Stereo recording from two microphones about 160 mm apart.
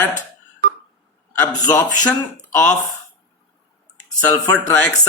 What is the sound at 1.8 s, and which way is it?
Speech, 10° left (ahead or behind).